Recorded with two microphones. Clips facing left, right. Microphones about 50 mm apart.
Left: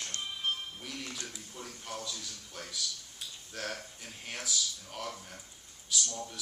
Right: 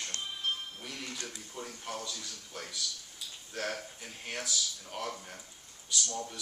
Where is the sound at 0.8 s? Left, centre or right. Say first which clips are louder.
Even; centre.